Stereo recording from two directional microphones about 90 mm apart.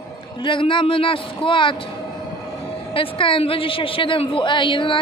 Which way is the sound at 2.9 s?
80° left.